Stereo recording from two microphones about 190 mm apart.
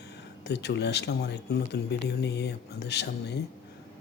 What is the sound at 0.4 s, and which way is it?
A man's voice, 60° left (ahead or behind).